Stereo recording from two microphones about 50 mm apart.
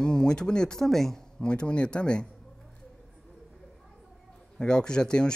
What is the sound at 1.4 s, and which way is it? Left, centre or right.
Speech, centre.